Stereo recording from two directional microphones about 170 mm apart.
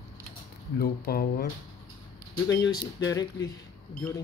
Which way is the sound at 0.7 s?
65° left (ahead or behind).